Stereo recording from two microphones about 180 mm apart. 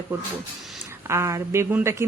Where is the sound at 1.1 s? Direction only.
15° right (ahead or behind).